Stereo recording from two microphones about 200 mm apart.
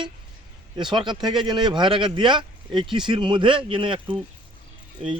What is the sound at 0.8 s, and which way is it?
Speech, 20° right (ahead or behind).